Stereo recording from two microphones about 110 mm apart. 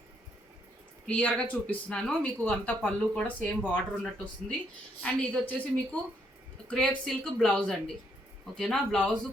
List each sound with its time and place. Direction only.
1.0 s speech: 10° left (ahead or behind)